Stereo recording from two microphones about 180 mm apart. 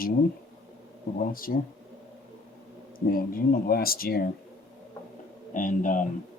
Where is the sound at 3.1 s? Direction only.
55° left (ahead or behind).